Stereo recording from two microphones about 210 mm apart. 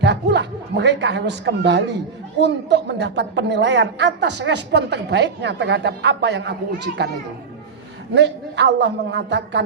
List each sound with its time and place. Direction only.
0.0 s a woman's voice: 55° right (ahead or behind)
8.1 s a woman's voice: 55° right (ahead or behind)